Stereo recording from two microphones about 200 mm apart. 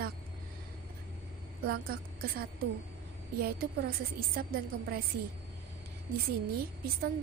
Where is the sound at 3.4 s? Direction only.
50° right (ahead or behind).